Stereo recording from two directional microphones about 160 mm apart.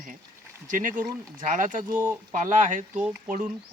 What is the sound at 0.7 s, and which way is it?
Speech, 55° right (ahead or behind).